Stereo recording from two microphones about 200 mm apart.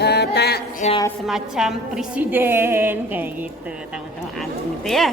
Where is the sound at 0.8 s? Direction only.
35° left (ahead or behind).